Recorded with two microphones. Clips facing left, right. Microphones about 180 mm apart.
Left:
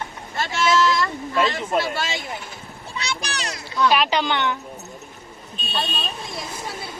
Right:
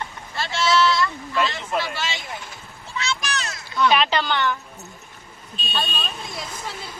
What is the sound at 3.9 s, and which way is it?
Speech, 5° left (ahead or behind).